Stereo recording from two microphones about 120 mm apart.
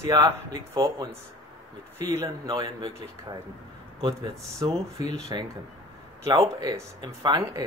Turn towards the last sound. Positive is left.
turn(degrees=-30)  # may be behind; listen again after turning